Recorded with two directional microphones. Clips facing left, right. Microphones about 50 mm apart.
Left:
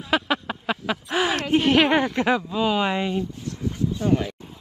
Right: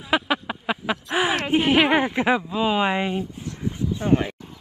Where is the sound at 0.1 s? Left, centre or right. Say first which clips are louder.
Right 1 dB; centre.